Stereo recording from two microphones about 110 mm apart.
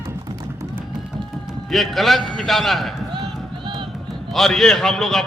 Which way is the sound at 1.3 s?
Centre (ahead or behind).